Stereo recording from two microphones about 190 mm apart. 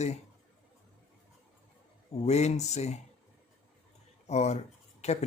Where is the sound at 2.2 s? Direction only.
35° left (ahead or behind).